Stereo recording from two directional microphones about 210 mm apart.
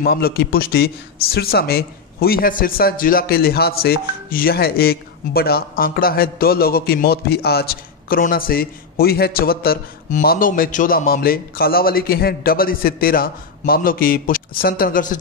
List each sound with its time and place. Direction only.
0.0 s a man's voice: 45° left (ahead or behind)